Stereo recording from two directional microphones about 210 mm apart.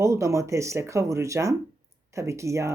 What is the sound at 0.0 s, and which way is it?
Speech, 15° right (ahead or behind).